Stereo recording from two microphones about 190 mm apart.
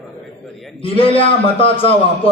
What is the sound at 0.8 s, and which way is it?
A man's voice, 30° left (ahead or behind).